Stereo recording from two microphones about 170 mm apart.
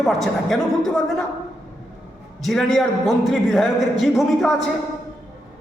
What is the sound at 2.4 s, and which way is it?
A man's voice, centre (ahead or behind).